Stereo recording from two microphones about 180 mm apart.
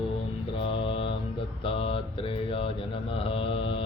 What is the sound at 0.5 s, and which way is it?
Mantra, 30° left (ahead or behind).